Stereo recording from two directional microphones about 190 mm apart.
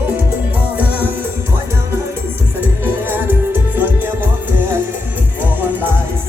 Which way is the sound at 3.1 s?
10° right (ahead or behind).